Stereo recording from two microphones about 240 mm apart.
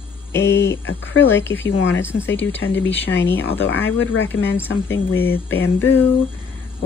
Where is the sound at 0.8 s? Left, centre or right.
Left.